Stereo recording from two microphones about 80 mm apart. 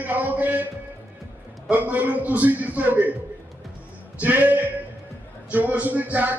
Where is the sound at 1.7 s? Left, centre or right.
Right.